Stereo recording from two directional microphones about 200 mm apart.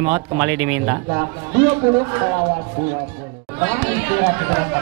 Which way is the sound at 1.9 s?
20° right (ahead or behind).